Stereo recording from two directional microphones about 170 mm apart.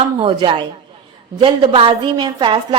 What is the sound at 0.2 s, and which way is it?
A woman's voice, 30° right (ahead or behind).